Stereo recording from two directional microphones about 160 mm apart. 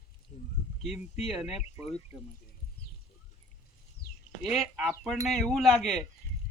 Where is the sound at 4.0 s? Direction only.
75° left (ahead or behind).